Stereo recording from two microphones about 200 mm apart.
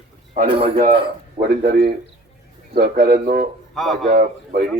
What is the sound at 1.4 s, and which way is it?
A man's voice, 55° right (ahead or behind).